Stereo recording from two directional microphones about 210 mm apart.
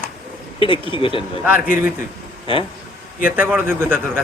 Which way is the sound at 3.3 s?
10° right (ahead or behind).